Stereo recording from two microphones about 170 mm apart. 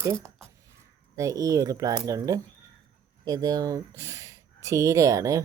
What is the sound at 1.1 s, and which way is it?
Speech, 20° right (ahead or behind).